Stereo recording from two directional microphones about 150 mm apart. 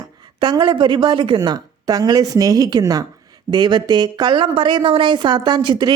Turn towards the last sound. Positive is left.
turn(degrees=-30)  # may be behind; listen again after turning